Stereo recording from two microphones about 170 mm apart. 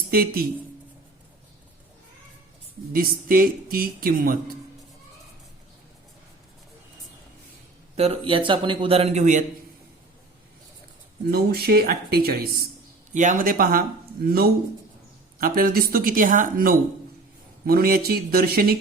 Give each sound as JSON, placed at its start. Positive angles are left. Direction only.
{"t": 0.1, "sound": "speech", "side_deg": -60}
{"t": 2.9, "sound": "speech", "side_deg": -60}
{"t": 7.9, "sound": "a man's voice", "side_deg": -40}
{"t": 11.3, "sound": "speech", "side_deg": -65}
{"t": 13.1, "sound": "speech", "side_deg": -50}